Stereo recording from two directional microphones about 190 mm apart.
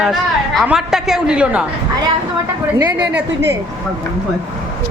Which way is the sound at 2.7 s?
15° right (ahead or behind).